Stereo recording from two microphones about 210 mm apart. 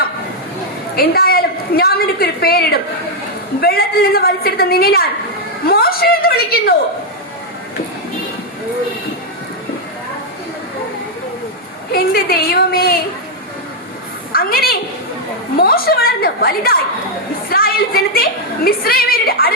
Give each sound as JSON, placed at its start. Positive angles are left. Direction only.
{"t": 0.9, "sound": "a woman's voice", "side_deg": 45}
{"t": 11.9, "sound": "a woman's voice", "side_deg": 45}
{"t": 14.3, "sound": "a sound", "side_deg": 45}
{"t": 15.5, "sound": "a woman's voice", "side_deg": 45}